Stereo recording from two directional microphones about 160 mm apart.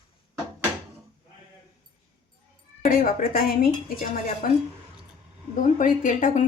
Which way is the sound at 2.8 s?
60° left (ahead or behind).